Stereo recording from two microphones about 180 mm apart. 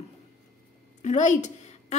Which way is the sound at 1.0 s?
40° left (ahead or behind).